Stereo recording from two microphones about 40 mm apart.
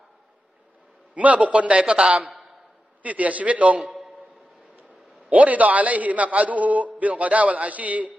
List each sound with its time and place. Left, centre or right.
1.1 s a man's voice: right
1.8 s a man's voice: right
3.0 s a man's voice: right
5.3 s a man's voice: right